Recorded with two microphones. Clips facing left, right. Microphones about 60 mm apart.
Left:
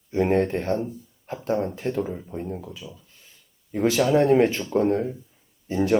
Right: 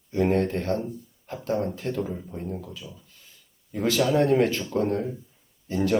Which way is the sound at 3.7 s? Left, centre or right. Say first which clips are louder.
Left 3 dB; centre.